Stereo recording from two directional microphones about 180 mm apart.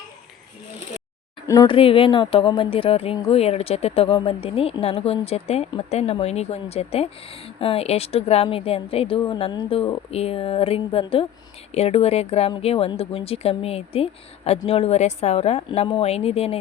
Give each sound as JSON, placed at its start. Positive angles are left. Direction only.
{"t": 1.5, "sound": "speech", "side_deg": 20}
{"t": 1.7, "sound": "speech", "side_deg": 30}